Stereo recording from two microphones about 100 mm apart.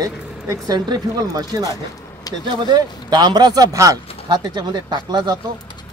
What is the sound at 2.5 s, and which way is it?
A man's voice, 50° right (ahead or behind).